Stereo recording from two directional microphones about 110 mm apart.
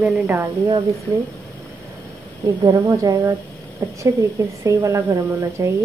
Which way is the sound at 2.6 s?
35° right (ahead or behind).